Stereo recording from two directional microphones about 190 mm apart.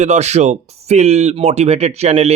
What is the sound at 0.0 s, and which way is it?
Speech, 35° right (ahead or behind).